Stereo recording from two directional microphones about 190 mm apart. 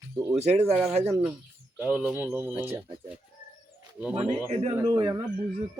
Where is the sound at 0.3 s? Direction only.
35° right (ahead or behind).